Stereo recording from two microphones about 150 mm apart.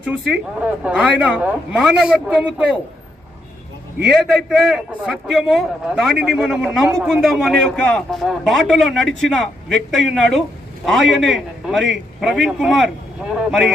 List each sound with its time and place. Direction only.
0.0 s a woman's voice: 10° right (ahead or behind)
4.1 s a man's voice: centre (ahead or behind)